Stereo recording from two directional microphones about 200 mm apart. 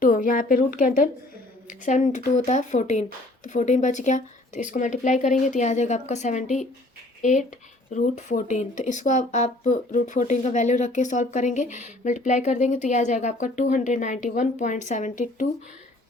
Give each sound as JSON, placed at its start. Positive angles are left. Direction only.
{"t": 0.0, "sound": "a woman's voice", "side_deg": 40}